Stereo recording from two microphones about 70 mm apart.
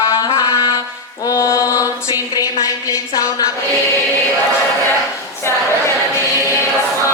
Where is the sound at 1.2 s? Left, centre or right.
Left.